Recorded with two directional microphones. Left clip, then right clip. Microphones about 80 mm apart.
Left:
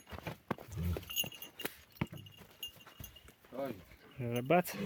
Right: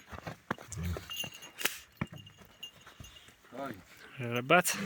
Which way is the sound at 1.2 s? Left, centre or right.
Left.